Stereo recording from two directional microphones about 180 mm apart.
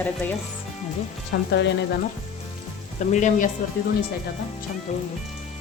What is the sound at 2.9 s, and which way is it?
Speech, 45° left (ahead or behind).